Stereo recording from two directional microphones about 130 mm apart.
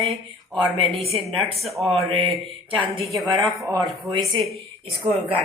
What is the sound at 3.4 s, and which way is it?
A woman's voice, 25° right (ahead or behind).